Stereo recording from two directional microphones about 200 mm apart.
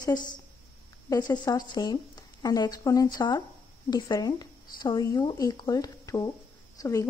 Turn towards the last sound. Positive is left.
turn(degrees=15)  # may be behind; listen again after turning